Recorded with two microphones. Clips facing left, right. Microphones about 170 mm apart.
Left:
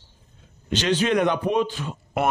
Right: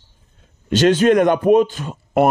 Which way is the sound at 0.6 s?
45° right (ahead or behind).